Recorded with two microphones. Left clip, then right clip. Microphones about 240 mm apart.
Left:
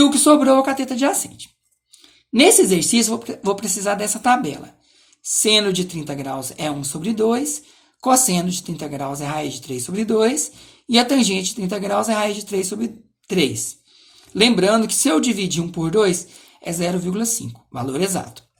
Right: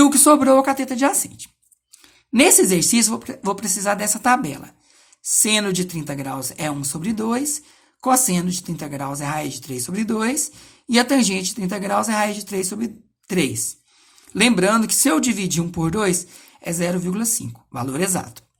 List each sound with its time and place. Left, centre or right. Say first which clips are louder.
0.0 s speech: even; right
5.4 s speech: left 4 dB; right